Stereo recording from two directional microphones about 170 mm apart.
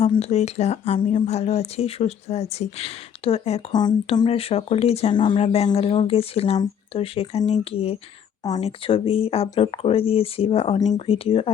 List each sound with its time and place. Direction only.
0.0 s speech: 40° left (ahead or behind)
3.7 s speech: 25° left (ahead or behind)